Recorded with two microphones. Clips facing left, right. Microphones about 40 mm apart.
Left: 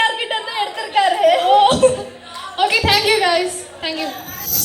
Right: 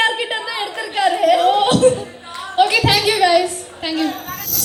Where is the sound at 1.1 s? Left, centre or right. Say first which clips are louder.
Even; centre.